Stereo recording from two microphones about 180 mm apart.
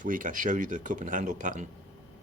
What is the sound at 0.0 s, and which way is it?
Speech, 50° right (ahead or behind).